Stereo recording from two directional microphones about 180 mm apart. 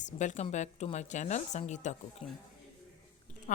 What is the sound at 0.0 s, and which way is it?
Speech, 40° left (ahead or behind).